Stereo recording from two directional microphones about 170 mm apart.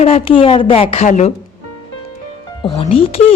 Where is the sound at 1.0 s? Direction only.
45° left (ahead or behind).